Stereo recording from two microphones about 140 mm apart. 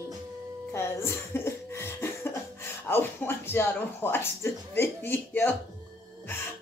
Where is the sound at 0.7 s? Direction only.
20° left (ahead or behind).